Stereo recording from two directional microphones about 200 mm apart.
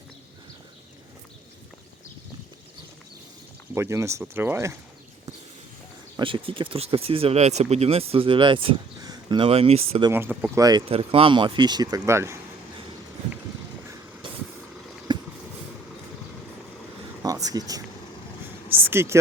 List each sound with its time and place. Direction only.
3.8 s speech: 15° right (ahead or behind)
6.1 s speech: 25° right (ahead or behind)
10.1 s speech: 10° right (ahead or behind)
13.8 s vehicle: 15° right (ahead or behind)
15.1 s a sound: 20° right (ahead or behind)
17.2 s a sound: 20° right (ahead or behind)